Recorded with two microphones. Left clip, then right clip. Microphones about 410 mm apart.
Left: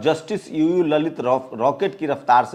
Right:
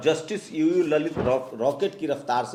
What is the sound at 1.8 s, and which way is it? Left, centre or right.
Speech, left.